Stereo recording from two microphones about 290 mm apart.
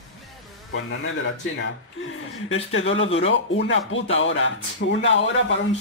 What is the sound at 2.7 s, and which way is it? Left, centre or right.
Speech, left.